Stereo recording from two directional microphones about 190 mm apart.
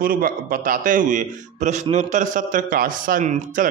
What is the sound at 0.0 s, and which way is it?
A man's voice, 50° right (ahead or behind).